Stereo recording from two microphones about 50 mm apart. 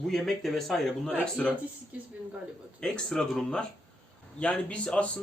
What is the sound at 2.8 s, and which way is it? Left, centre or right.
Speech, centre.